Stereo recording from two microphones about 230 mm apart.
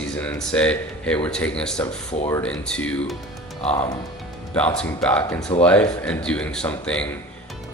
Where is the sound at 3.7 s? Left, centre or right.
Left.